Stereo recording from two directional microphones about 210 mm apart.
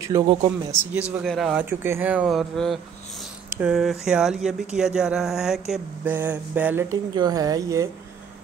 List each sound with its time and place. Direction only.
0.0 s speech: 20° right (ahead or behind)
1.1 s speech: centre (ahead or behind); by 7.9 s 15° right (ahead or behind)